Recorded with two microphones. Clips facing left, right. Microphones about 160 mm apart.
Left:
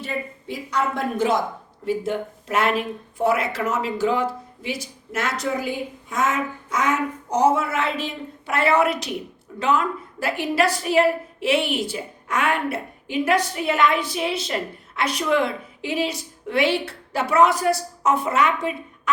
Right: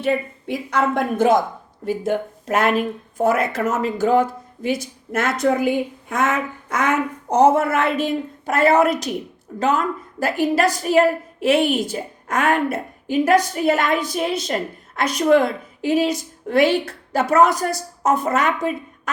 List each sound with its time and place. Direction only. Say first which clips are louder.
0.0 s a woman's voice: right 8 dB; 60° right (ahead or behind)